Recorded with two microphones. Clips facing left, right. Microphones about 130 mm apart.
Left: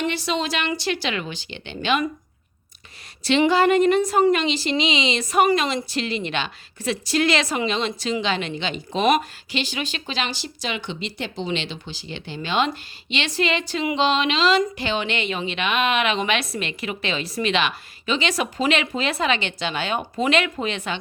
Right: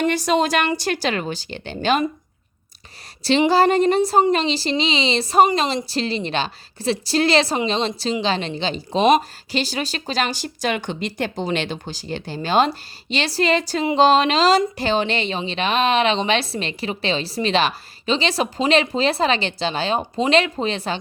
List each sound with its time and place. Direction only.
0.0 s speech: 45° right (ahead or behind)
3.2 s speech: 35° right (ahead or behind)